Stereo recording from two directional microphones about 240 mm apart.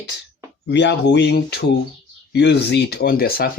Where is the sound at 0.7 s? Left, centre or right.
Left.